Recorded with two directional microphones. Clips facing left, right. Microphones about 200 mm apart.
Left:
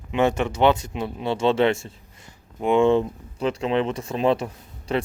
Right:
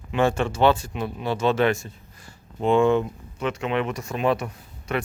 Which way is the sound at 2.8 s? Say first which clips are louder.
Left 2 dB; 30° left (ahead or behind).